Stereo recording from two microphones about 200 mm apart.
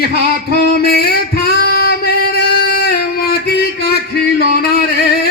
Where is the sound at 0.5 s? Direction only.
50° left (ahead or behind).